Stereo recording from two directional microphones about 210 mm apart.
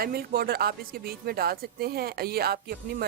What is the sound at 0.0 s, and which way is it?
Speech, 45° right (ahead or behind).